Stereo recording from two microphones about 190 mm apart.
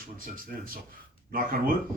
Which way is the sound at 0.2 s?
50° right (ahead or behind).